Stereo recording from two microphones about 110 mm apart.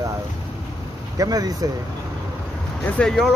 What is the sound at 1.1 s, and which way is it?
Speech, 35° right (ahead or behind).